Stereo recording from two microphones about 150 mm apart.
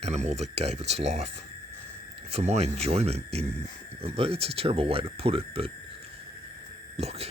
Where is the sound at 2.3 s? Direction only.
45° right (ahead or behind).